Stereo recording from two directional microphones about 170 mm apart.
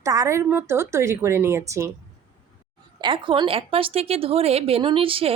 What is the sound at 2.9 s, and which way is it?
A woman's voice, 25° right (ahead or behind).